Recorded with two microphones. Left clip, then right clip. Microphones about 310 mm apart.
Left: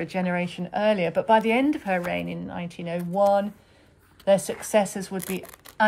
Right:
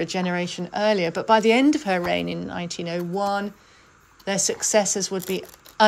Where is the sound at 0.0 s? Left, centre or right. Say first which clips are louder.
Right 2 dB; centre.